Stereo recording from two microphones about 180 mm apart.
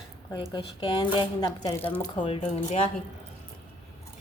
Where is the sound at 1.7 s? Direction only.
10° left (ahead or behind).